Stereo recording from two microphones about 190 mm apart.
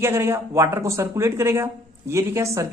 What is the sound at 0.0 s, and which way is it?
Speech, 15° right (ahead or behind).